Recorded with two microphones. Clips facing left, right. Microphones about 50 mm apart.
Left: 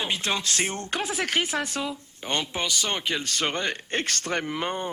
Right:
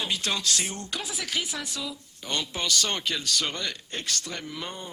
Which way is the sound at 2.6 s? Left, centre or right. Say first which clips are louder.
Even; centre.